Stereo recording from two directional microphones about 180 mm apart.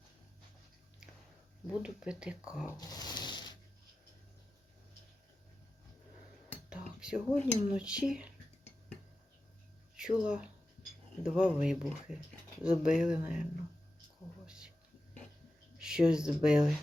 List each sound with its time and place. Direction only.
1.6 s speech: 5° right (ahead or behind)
2.6 s a sound: 20° left (ahead or behind)
6.7 s cutlery: 5° right (ahead or behind)
7.8 s speech: 5° right (ahead or behind)
10.0 s speech: 5° right (ahead or behind)
14.4 s a sound: 5° right (ahead or behind)
15.8 s speech: 5° right (ahead or behind)